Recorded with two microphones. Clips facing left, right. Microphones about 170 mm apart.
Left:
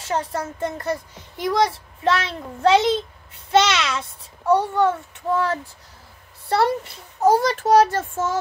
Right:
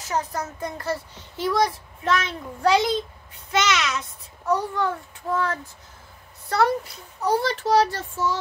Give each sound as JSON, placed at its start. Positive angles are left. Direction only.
{"t": 0.0, "sound": "a child's voice", "side_deg": 25}
{"t": 6.5, "sound": "speech", "side_deg": 30}
{"t": 7.2, "sound": "a child's voice", "side_deg": 45}